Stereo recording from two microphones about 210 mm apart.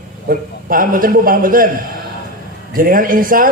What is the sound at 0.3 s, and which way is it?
A man's voice, 40° right (ahead or behind).